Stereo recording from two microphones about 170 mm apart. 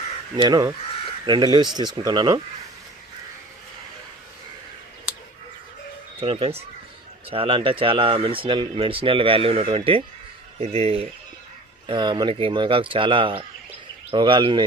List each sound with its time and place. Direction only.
0.3 s speech: 25° right (ahead or behind)
6.1 s speech: 30° right (ahead or behind)